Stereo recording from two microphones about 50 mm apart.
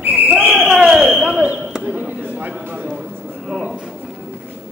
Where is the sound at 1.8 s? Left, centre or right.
Right.